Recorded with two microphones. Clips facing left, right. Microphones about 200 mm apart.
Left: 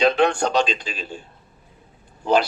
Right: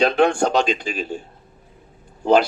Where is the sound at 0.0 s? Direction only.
50° right (ahead or behind).